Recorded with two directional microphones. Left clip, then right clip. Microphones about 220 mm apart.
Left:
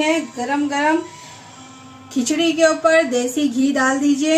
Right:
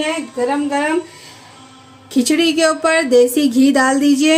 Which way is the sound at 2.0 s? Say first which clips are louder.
Right 4 dB; 40° right (ahead or behind).